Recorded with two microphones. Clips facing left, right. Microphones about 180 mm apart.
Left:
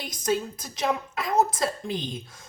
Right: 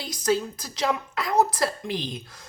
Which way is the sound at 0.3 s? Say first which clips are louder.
Right 2 dB; 20° left (ahead or behind).